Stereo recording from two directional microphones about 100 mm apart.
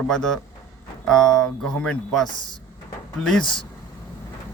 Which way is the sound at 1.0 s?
5° left (ahead or behind).